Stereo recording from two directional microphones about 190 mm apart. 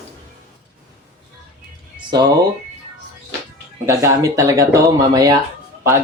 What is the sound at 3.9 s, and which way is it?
Speech, 15° right (ahead or behind).